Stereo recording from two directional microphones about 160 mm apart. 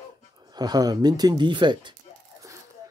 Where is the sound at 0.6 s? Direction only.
25° right (ahead or behind).